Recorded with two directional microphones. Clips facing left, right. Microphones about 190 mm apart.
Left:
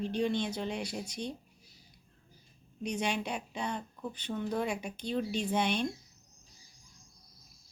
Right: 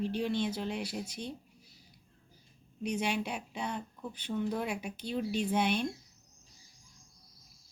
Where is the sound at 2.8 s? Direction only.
5° right (ahead or behind).